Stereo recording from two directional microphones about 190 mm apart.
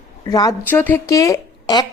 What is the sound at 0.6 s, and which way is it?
Speech, 10° left (ahead or behind).